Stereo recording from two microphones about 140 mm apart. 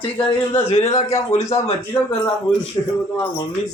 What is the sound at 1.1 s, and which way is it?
Speech, 20° left (ahead or behind).